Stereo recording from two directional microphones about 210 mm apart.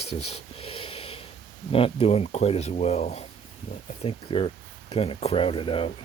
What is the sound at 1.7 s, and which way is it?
Speech, 25° left (ahead or behind).